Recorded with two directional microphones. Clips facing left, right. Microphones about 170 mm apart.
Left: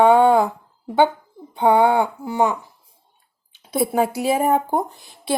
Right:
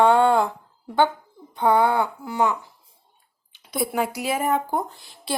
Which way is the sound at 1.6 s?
25° left (ahead or behind).